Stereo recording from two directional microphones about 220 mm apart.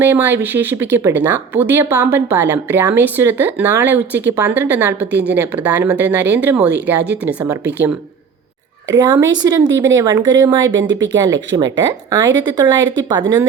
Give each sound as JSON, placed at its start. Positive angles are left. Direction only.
{"t": 0.0, "sound": "a woman's voice", "side_deg": -10}